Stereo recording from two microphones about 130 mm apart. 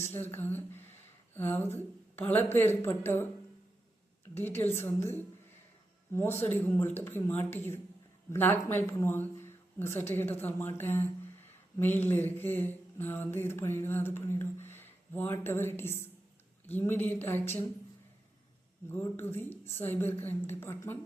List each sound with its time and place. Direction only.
0.1 s speech: 15° left (ahead or behind)
4.4 s speech: 15° left (ahead or behind)
18.9 s speech: 15° left (ahead or behind)